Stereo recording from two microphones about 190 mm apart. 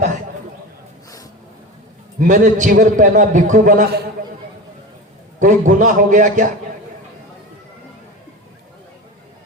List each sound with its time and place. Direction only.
2.1 s a man's voice: 45° right (ahead or behind)
5.4 s a man's voice: 40° right (ahead or behind)